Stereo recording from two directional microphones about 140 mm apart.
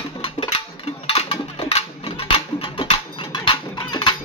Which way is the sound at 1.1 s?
45° left (ahead or behind).